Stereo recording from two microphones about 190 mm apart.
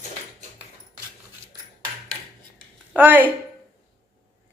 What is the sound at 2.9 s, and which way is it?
Speech, 10° right (ahead or behind).